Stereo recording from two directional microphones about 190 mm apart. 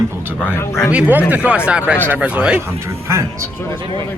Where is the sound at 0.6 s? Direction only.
15° left (ahead or behind).